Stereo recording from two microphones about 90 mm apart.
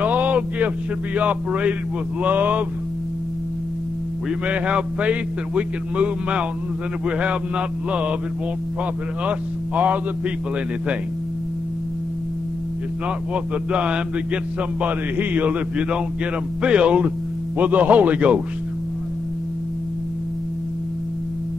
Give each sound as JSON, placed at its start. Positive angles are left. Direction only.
{"t": 0.0, "sound": "a sound", "side_deg": -20}
{"t": 1.1, "sound": "a man's voice", "side_deg": -15}
{"t": 4.5, "sound": "a man's voice", "side_deg": -15}
{"t": 9.2, "sound": "speech", "side_deg": -15}
{"t": 13.3, "sound": "a man's voice", "side_deg": -10}